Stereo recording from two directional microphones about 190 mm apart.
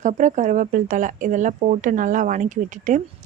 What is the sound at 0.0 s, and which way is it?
Speech, 40° right (ahead or behind).